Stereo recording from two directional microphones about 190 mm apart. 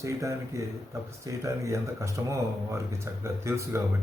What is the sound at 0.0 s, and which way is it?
Speech, 15° right (ahead or behind).